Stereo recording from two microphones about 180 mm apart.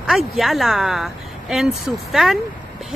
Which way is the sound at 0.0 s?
Centre (ahead or behind).